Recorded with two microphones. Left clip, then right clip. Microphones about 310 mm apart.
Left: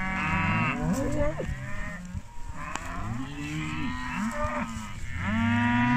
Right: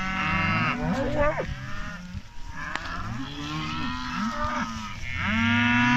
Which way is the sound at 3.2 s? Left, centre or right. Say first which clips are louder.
Right 3 dB; right.